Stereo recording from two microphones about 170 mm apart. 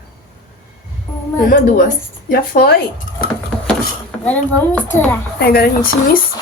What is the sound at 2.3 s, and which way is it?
Speech, 65° left (ahead or behind).